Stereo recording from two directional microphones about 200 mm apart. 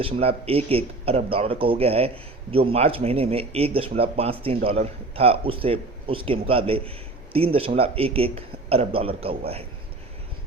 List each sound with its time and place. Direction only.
0.0 s a man's voice: 30° right (ahead or behind)